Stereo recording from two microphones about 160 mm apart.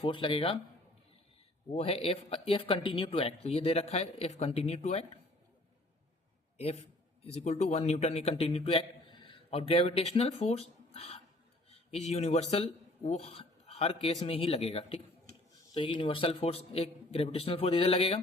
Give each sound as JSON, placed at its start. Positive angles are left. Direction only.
{"t": 0.0, "sound": "speech", "side_deg": 30}
{"t": 1.7, "sound": "speech", "side_deg": 40}
{"t": 6.6, "sound": "a man's voice", "side_deg": 40}